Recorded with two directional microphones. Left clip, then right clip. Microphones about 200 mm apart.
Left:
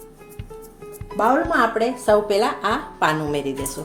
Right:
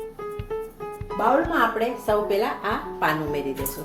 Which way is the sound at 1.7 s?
45° left (ahead or behind).